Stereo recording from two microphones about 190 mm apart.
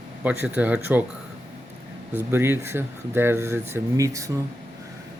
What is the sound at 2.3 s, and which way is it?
Speech, 10° right (ahead or behind).